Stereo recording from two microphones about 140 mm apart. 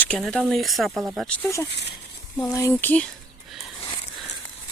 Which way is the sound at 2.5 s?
20° left (ahead or behind).